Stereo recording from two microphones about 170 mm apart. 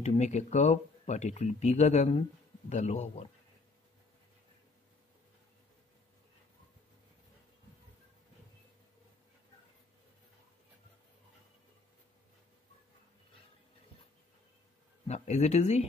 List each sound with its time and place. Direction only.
0.0 s speech: 40° left (ahead or behind)
15.0 s speech: 40° left (ahead or behind)